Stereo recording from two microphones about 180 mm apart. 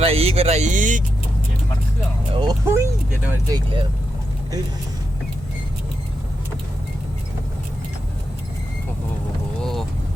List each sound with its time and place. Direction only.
0.0 s speech: 35° right (ahead or behind)
2.3 s speech: 25° right (ahead or behind)
9.6 s vehicle: centre (ahead or behind)